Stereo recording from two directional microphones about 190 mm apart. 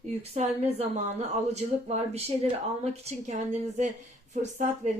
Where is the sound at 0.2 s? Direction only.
35° right (ahead or behind).